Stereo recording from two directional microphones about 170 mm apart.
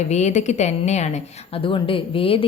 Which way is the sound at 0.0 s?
40° left (ahead or behind).